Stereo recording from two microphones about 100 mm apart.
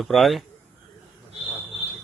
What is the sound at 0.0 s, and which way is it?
Speech, centre (ahead or behind).